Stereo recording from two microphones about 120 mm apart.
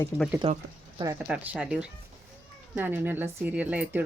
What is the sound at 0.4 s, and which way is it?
Speech, 55° right (ahead or behind).